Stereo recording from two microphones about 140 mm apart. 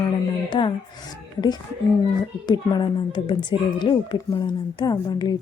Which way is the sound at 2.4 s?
30° left (ahead or behind).